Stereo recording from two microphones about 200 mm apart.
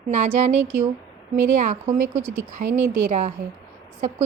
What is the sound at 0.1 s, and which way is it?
A woman's voice, 35° right (ahead or behind).